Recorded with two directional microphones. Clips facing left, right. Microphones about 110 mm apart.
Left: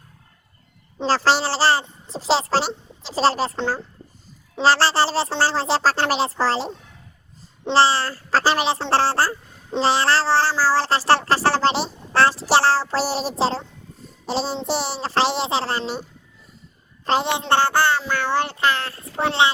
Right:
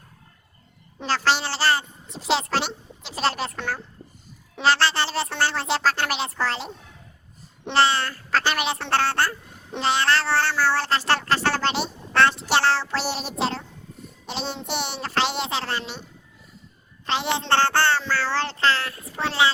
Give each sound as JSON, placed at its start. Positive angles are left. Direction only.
{"t": 1.0, "sound": "cat", "side_deg": 35}
{"t": 17.1, "sound": "cat", "side_deg": 40}
{"t": 17.4, "sound": "child singing", "side_deg": 10}
{"t": 18.1, "sound": "a child's voice", "side_deg": 20}